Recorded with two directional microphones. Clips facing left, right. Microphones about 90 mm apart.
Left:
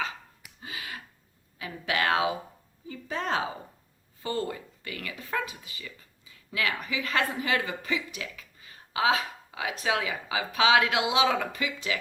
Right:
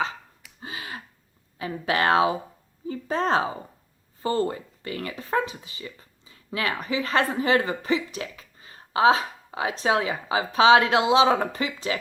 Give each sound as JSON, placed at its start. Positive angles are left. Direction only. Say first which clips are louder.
{"t": 0.6, "sound": "gasp", "louder": "right 3 dB", "side_deg": -30}
{"t": 1.5, "sound": "speech", "louder": "right 5 dB", "side_deg": -35}